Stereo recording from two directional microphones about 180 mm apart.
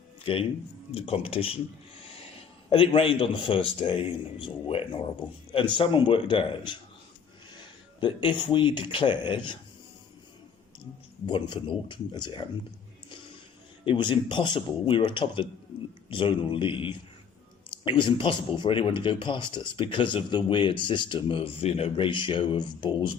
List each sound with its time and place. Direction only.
0.3 s speech: 30° left (ahead or behind)
2.6 s speech: 30° left (ahead or behind)
8.0 s speech: 25° left (ahead or behind)
11.3 s speech: 25° left (ahead or behind)
13.8 s speech: 30° left (ahead or behind)